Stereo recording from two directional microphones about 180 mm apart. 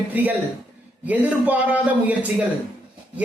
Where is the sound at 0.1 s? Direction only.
10° right (ahead or behind).